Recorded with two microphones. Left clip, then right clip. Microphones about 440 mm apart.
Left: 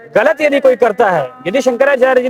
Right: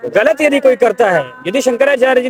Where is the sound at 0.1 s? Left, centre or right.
Left.